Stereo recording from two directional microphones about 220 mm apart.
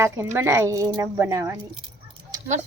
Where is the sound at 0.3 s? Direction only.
10° right (ahead or behind).